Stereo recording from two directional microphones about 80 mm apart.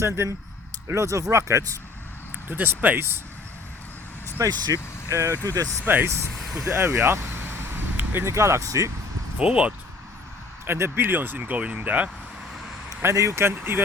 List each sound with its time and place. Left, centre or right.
0.0 s speech: right
2.5 s speech: right
4.3 s vehicle: right
4.6 s speech: right
5.8 s speech: right
9.4 s speech: centre
10.7 s speech: right
13.0 s speech: right